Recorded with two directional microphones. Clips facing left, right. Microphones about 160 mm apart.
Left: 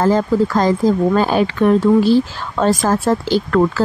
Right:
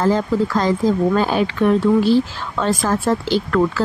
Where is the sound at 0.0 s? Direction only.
45° left (ahead or behind).